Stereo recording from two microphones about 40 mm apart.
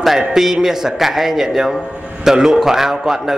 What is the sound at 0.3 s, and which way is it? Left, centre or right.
A man's voice, centre.